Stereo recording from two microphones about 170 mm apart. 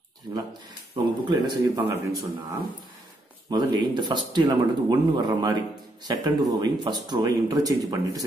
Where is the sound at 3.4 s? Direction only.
25° right (ahead or behind).